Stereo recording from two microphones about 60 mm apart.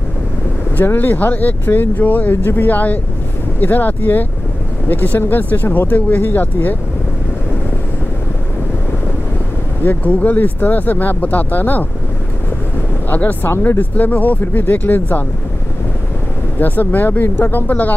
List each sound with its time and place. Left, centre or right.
0.8 s speech: left
9.8 s speech: left
13.1 s speech: left
16.5 s speech: left